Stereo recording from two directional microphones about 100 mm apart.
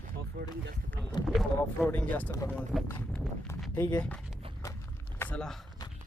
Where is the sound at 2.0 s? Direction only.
15° left (ahead or behind).